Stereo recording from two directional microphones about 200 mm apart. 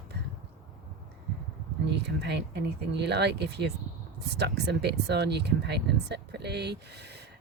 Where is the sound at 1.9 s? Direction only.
60° right (ahead or behind).